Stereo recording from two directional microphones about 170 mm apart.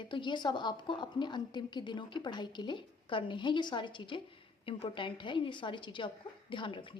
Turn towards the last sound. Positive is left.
turn(degrees=30)  # may be behind; listen again after turning